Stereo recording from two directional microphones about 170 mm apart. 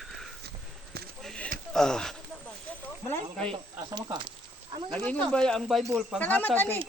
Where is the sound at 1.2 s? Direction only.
Centre (ahead or behind).